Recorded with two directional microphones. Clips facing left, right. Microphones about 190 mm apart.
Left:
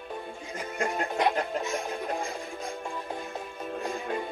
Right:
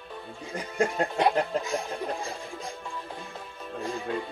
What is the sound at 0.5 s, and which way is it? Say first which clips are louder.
Music: right 4 dB; 35° right (ahead or behind).